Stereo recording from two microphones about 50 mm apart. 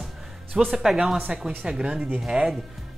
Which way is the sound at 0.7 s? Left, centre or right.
Centre.